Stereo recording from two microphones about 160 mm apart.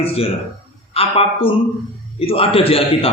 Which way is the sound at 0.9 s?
35° left (ahead or behind).